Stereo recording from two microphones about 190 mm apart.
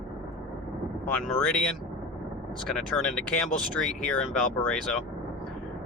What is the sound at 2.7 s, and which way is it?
Speech, 5° left (ahead or behind).